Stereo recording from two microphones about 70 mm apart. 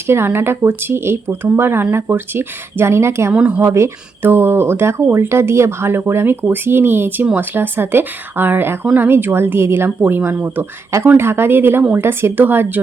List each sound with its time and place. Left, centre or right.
0.1 s speech: right
3.3 s speech: centre
3.6 s speech: right